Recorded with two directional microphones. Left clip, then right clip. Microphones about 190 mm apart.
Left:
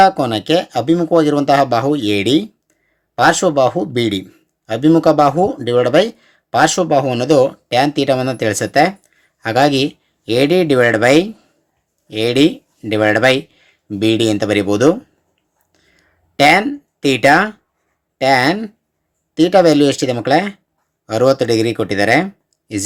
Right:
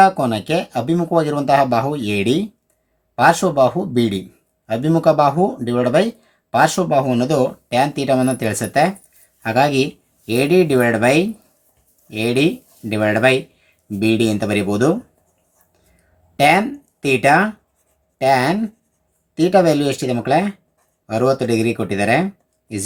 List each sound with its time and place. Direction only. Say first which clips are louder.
0.0 s speech: left 2 dB; 25° left (ahead or behind)
15.7 s a sound: left 8 dB; 30° left (ahead or behind)
18.2 s speech: left 2 dB; 30° left (ahead or behind)